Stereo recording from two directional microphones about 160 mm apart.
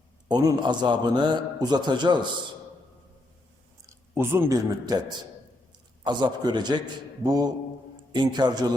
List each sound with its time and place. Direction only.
0.3 s a man's voice: 25° right (ahead or behind)
3.8 s speech: 15° right (ahead or behind)
6.1 s a man's voice: 25° right (ahead or behind)